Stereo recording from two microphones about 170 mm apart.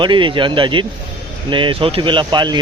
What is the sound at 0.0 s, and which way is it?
Speech, 30° right (ahead or behind).